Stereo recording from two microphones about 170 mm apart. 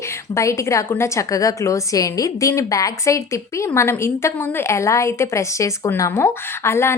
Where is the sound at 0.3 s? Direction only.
15° left (ahead or behind).